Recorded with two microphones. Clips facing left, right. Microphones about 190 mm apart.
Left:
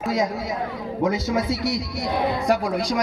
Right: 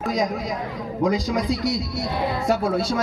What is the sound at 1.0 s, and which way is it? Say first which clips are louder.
Speech: right 1 dB; 5° left (ahead or behind).